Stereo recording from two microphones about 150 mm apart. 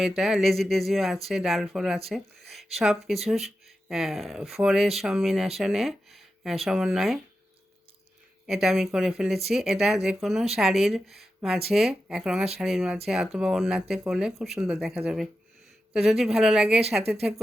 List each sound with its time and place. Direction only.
0.2 s speech: centre (ahead or behind)
8.4 s speech: 5° right (ahead or behind)